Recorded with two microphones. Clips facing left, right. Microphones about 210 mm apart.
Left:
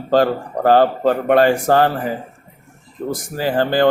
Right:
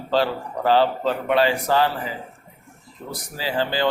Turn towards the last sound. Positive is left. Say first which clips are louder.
# left 7 dB
turn(degrees=50)  # may be behind; listen again after turning